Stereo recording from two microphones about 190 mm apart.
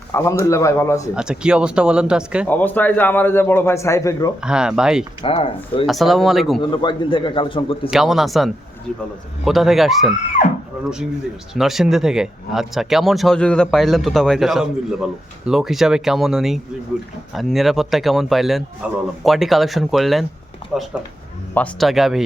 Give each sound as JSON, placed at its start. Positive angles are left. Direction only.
{"t": 0.1, "sound": "a man's voice", "side_deg": 15}
{"t": 1.1, "sound": "speech", "side_deg": -5}
{"t": 2.5, "sound": "a man's voice", "side_deg": 10}
{"t": 4.4, "sound": "speech", "side_deg": -5}
{"t": 5.2, "sound": "a man's voice", "side_deg": 30}
{"t": 5.8, "sound": "speech", "side_deg": 0}
{"t": 6.6, "sound": "a man's voice", "side_deg": 25}
{"t": 7.9, "sound": "speech", "side_deg": 0}
{"t": 11.5, "sound": "speech", "side_deg": 0}